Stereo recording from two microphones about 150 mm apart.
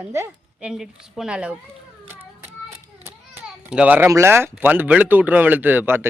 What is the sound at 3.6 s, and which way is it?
Speech, 10° right (ahead or behind).